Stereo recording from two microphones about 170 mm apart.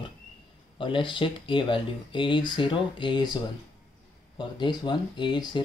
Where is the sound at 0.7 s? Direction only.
30° left (ahead or behind).